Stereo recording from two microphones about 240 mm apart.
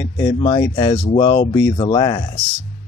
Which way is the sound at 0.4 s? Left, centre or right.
Centre.